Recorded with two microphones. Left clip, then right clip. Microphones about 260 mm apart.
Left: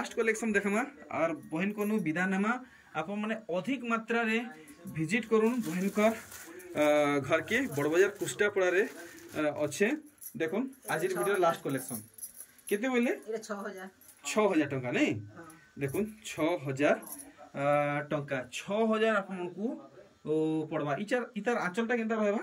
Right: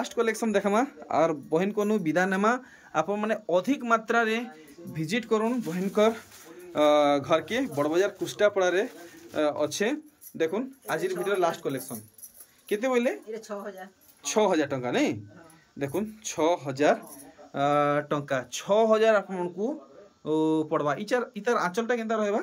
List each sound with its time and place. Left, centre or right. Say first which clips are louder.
0.0 s speech: right 4 dB; centre
0.7 s speech: right 8 dB; right
1.8 s speech: right 7 dB; centre
14.2 s speech: right 4 dB; centre